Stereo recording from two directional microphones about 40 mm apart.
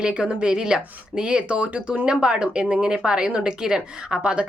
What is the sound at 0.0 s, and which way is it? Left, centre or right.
A woman's voice, right.